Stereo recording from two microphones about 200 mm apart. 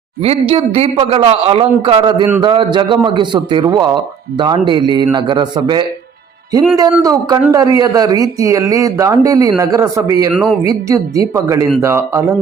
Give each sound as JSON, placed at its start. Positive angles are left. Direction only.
{"t": 0.2, "sound": "a man's voice", "side_deg": -30}